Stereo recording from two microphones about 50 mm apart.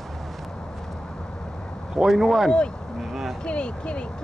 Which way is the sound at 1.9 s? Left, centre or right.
Centre.